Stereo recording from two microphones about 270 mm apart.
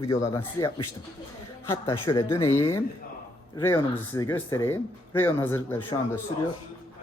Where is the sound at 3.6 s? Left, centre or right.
Centre.